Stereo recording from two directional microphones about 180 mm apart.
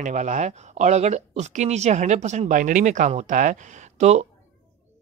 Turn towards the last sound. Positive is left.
turn(degrees=-40)  # may be behind; listen again after turning